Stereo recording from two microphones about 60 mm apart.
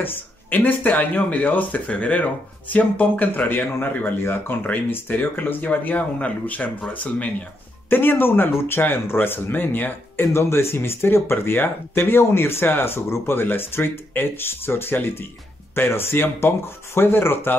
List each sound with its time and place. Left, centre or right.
0.0 s speech: left